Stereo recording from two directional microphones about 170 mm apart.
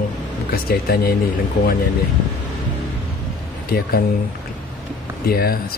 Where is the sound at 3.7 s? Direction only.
65° left (ahead or behind).